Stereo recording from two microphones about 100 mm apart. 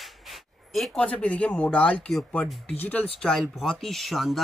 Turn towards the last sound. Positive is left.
turn(degrees=0)  # may be behind; listen again after turning